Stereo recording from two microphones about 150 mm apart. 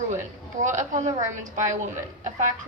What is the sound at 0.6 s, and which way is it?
A woman's voice, 55° right (ahead or behind).